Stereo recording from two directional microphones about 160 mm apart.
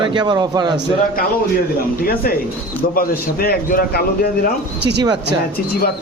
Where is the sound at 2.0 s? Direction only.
70° left (ahead or behind).